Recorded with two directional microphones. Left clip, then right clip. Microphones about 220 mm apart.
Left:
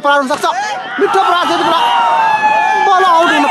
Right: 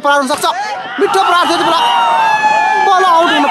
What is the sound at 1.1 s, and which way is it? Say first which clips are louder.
Speech: right 1 dB; 20° right (ahead or behind).